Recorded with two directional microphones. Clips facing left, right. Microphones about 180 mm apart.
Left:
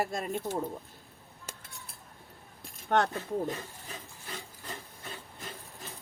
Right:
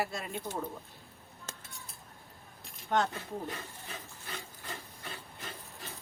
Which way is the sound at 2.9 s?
60° left (ahead or behind).